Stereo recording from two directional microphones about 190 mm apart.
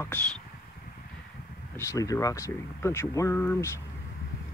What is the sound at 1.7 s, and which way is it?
Speech, 15° left (ahead or behind).